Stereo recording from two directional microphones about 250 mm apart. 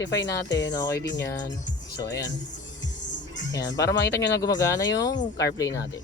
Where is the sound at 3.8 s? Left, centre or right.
Left.